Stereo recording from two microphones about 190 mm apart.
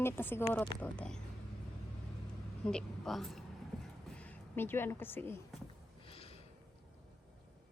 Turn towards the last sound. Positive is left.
turn(degrees=30)  # may be behind; listen again after turning